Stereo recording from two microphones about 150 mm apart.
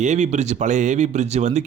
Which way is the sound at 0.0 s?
50° right (ahead or behind).